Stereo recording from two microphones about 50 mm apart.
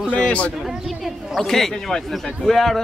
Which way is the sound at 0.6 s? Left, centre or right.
Centre.